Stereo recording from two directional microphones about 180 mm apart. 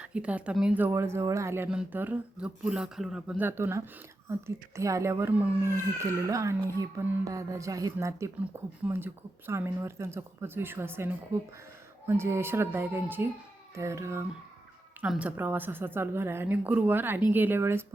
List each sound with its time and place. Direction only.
0.0 s speech: 5° right (ahead or behind)